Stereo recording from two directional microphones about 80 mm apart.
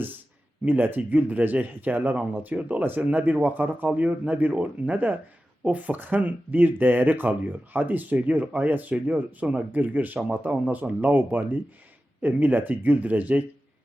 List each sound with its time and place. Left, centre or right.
0.6 s speech: right